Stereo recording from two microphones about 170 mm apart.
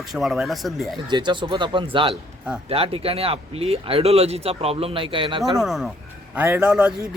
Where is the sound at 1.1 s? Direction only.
25° right (ahead or behind).